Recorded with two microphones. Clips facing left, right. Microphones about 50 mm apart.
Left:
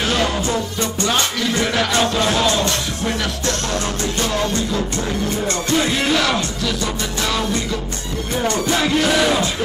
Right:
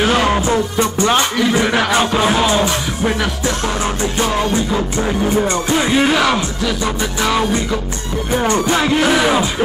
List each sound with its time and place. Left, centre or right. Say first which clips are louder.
0.0 s music: right 5 dB; centre
8.6 s music: right 3 dB; centre